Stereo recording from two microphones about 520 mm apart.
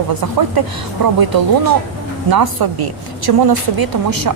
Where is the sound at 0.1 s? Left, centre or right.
Right.